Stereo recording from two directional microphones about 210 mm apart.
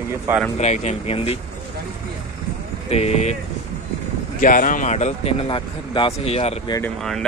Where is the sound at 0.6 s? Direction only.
30° left (ahead or behind).